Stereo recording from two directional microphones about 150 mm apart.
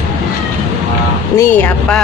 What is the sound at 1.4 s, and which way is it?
Speech, 10° left (ahead or behind).